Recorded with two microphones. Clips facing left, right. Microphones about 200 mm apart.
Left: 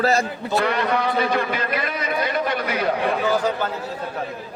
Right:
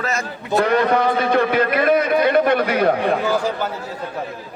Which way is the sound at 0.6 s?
45° right (ahead or behind).